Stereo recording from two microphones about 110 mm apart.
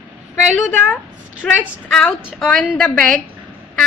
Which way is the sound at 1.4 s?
5° left (ahead or behind).